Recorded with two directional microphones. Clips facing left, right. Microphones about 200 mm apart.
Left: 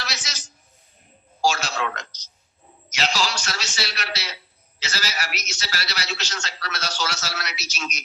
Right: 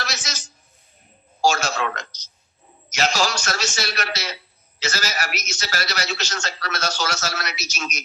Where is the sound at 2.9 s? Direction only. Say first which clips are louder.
Right 3 dB; 45° right (ahead or behind).